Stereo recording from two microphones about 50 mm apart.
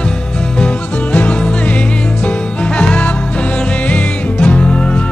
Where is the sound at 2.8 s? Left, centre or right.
Left.